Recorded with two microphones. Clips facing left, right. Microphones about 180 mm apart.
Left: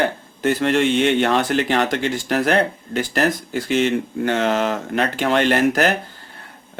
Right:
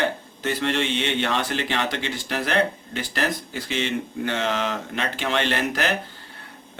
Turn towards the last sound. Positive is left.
turn(degrees=45)  # may be behind; listen again after turning